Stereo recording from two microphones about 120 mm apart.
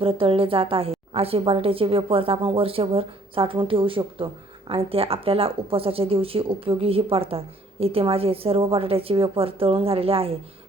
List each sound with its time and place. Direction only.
0.0 s speech: 50° right (ahead or behind)